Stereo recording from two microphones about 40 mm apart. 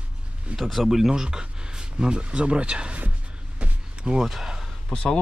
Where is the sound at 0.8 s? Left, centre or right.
Centre.